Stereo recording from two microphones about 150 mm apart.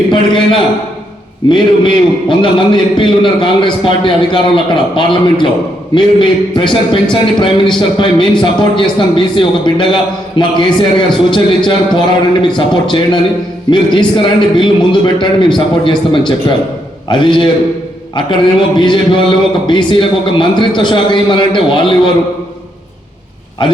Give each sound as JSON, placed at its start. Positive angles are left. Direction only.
{"t": 0.1, "sound": "a man's voice", "side_deg": 35}
{"t": 23.6, "sound": "a man's voice", "side_deg": 30}